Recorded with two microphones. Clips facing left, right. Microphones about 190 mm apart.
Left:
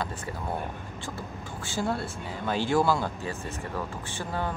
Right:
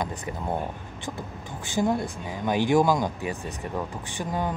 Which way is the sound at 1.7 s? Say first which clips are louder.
Right 5 dB; 15° right (ahead or behind).